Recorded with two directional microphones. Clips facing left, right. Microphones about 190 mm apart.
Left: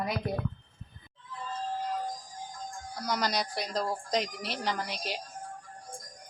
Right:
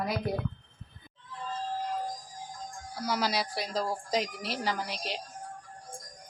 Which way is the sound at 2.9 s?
5° right (ahead or behind).